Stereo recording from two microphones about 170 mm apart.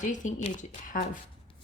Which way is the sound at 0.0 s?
45° left (ahead or behind).